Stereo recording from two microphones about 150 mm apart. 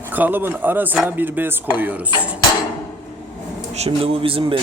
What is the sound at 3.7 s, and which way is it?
Speech, 40° right (ahead or behind).